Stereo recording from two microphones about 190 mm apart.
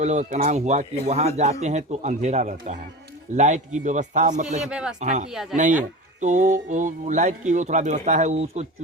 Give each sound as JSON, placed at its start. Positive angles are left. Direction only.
{"t": 0.0, "sound": "speech", "side_deg": -40}
{"t": 4.6, "sound": "speech", "side_deg": -5}
{"t": 4.9, "sound": "speech", "side_deg": -40}
{"t": 5.3, "sound": "speech", "side_deg": 0}
{"t": 6.1, "sound": "speech", "side_deg": -40}